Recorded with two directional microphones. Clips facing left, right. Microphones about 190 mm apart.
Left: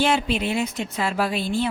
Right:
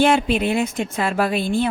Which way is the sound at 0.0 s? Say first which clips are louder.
Right 5 dB; 50° right (ahead or behind).